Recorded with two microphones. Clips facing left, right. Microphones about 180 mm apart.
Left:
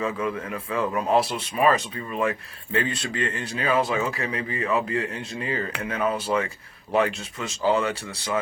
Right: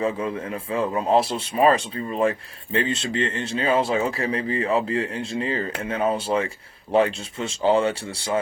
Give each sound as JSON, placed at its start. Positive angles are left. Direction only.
{"t": 0.0, "sound": "speech", "side_deg": -30}